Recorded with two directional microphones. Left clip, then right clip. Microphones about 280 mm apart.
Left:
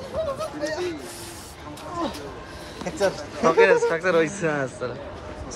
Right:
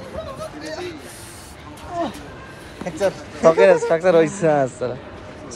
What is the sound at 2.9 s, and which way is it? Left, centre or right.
Speech, centre.